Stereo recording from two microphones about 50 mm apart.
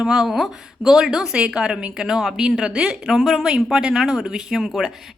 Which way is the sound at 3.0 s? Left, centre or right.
Centre.